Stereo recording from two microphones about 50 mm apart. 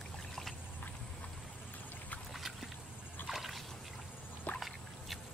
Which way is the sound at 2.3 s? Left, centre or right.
Centre.